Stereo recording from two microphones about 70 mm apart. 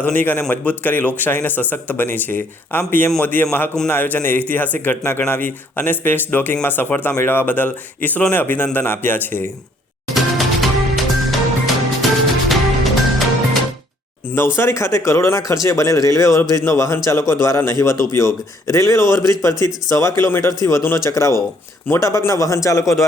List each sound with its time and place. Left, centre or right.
0.0 s a man's voice: left
10.2 s music: centre
14.3 s speech: left